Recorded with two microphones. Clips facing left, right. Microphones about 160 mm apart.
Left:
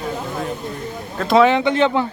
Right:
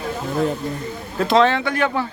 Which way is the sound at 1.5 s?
20° left (ahead or behind).